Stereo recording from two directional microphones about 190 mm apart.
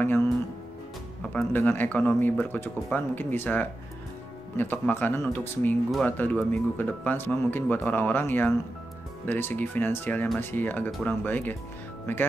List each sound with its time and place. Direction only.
1.2 s speech: 5° left (ahead or behind)